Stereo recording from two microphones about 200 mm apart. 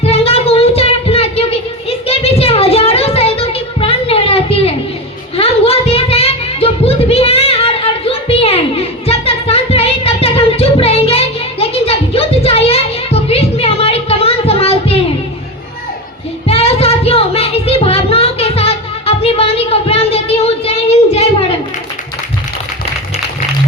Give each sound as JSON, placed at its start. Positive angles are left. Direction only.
{"t": 0.0, "sound": "child singing", "side_deg": 30}
{"t": 2.0, "sound": "a sound", "side_deg": 30}
{"t": 16.5, "sound": "child singing", "side_deg": 30}